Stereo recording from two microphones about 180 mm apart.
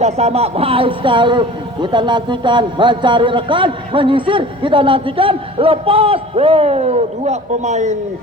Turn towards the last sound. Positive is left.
turn(degrees=-40)  # may be behind; listen again after turning